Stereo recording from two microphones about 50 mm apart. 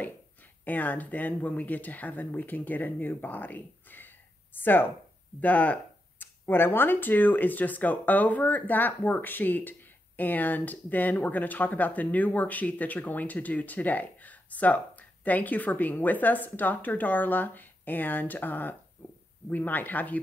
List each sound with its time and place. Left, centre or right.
0.7 s speech: left
5.4 s speech: left
6.1 s speech: left